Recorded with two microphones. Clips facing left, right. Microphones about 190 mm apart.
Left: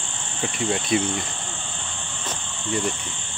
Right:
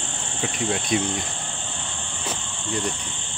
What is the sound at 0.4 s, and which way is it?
Cricket, centre (ahead or behind).